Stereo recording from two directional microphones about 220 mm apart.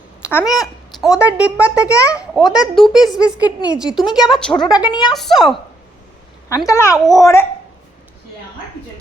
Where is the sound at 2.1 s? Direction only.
5° right (ahead or behind).